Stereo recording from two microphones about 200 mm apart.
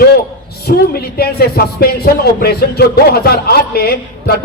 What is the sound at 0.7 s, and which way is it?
A man's voice, 45° left (ahead or behind).